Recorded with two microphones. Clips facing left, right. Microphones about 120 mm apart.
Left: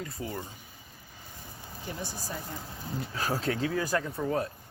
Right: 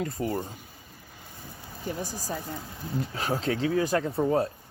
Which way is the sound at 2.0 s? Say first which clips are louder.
Right 4 dB; 40° right (ahead or behind).